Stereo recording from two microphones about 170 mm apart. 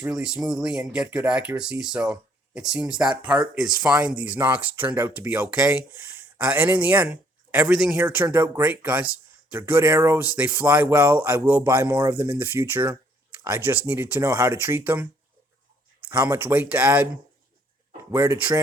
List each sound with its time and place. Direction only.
0.0 s speech: 5° right (ahead or behind)
18.1 s speech: 15° right (ahead or behind)